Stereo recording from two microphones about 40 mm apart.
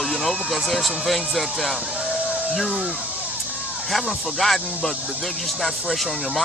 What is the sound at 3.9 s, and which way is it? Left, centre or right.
Speech, centre.